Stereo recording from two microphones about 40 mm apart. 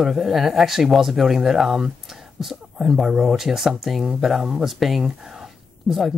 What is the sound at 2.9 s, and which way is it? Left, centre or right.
Speech, centre.